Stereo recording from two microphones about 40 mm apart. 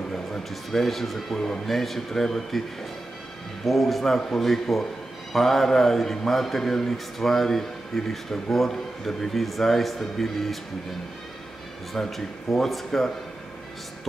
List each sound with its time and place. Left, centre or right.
0.1 s speech: centre
3.6 s a man's voice: centre
11.9 s a man's voice: centre